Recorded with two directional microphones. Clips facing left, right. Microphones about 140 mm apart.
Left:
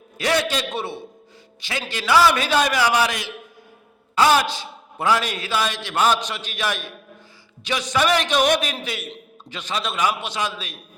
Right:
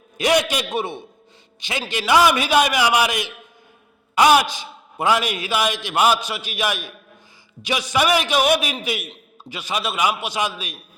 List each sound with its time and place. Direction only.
0.2 s a man's voice: 15° right (ahead or behind)